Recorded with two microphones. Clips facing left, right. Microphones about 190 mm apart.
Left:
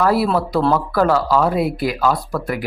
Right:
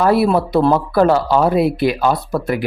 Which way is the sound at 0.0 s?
25° right (ahead or behind).